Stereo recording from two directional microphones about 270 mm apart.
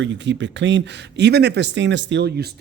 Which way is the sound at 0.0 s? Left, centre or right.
Right.